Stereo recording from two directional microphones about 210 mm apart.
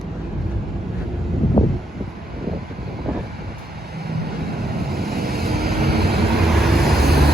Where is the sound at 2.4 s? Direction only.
Centre (ahead or behind).